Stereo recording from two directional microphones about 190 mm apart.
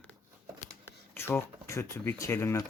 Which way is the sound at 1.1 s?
10° left (ahead or behind).